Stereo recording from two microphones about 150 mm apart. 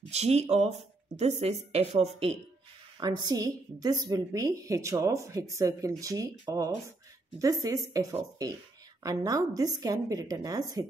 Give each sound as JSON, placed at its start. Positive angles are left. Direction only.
{"t": 0.1, "sound": "speech", "side_deg": -45}
{"t": 3.0, "sound": "a woman's voice", "side_deg": -30}